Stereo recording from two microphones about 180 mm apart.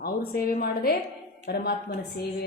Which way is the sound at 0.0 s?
55° left (ahead or behind).